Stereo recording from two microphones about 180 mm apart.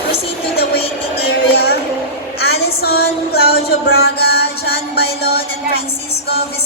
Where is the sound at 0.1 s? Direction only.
60° left (ahead or behind).